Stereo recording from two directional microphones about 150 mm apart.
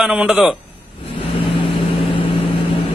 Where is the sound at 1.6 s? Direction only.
35° left (ahead or behind).